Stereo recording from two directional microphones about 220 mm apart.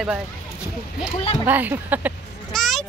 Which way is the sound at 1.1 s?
30° left (ahead or behind).